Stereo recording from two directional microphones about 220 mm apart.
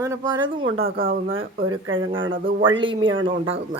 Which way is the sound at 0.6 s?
65° right (ahead or behind).